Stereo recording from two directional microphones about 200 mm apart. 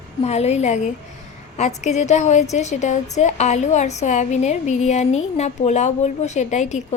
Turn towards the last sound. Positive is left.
turn(degrees=35)  # may be behind; listen again after turning